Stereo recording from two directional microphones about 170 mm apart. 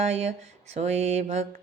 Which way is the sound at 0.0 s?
40° right (ahead or behind).